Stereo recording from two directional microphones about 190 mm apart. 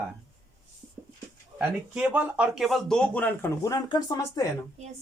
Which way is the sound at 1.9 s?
5° right (ahead or behind).